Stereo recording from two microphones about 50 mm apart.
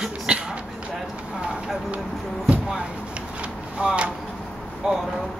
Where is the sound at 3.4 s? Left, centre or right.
Right.